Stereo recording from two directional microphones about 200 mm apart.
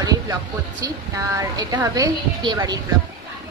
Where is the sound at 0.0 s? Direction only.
20° right (ahead or behind).